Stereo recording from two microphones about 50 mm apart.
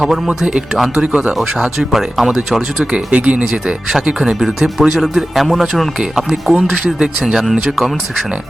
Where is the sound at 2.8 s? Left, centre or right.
Centre.